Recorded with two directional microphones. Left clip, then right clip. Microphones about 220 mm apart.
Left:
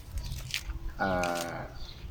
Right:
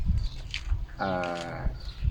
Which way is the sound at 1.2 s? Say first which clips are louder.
Left 1 dB; 45° left (ahead or behind).